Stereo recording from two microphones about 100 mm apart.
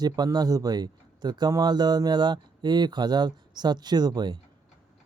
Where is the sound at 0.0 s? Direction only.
40° right (ahead or behind).